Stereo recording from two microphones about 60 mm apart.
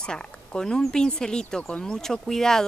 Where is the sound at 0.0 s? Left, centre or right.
Centre.